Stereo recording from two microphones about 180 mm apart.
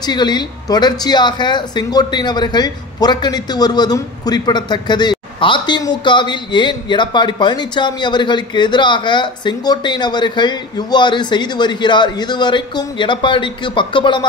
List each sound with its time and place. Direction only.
0.0 s speech: 25° left (ahead or behind)